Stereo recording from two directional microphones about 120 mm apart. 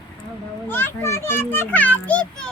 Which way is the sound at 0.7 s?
20° left (ahead or behind).